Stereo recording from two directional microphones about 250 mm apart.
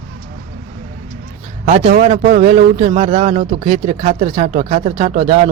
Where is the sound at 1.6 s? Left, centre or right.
Right.